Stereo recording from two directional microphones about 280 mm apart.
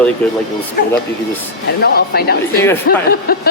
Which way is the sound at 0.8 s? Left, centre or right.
Left.